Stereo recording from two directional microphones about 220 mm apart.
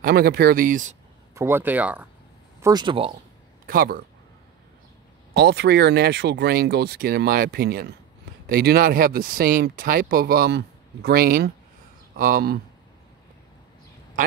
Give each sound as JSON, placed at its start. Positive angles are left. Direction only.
{"t": 0.0, "sound": "speech", "side_deg": -45}
{"t": 1.3, "sound": "speech", "side_deg": -10}
{"t": 2.6, "sound": "speech", "side_deg": -20}
{"t": 3.6, "sound": "speech", "side_deg": -40}
{"t": 5.3, "sound": "speech", "side_deg": -50}